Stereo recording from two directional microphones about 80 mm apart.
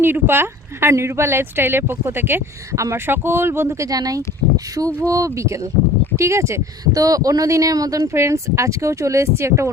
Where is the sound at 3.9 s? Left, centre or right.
Right.